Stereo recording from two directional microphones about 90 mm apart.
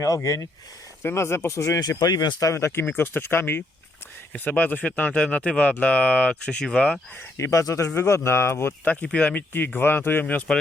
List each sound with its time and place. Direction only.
0.0 s speech: 35° left (ahead or behind)
2.8 s speech: 20° left (ahead or behind)
7.3 s speech: 35° left (ahead or behind); by 10.6 s 15° left (ahead or behind)